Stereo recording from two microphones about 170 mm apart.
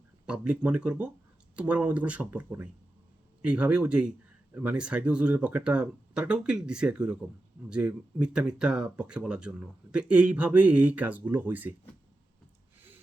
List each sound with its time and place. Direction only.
0.3 s speech: 5° right (ahead or behind)